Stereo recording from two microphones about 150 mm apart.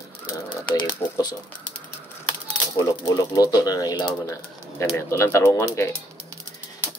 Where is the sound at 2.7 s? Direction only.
20° left (ahead or behind).